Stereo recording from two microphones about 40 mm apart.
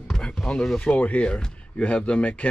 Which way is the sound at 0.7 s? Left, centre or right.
Left.